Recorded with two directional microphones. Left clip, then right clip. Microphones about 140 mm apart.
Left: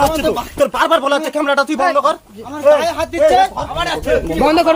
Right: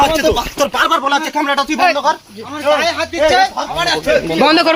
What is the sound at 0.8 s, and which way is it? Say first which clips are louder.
Speech: even; 90° left.